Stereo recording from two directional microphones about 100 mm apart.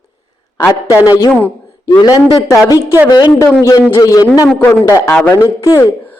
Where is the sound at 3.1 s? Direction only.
45° left (ahead or behind).